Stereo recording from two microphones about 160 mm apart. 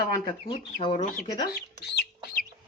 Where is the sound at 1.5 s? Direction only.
90° left.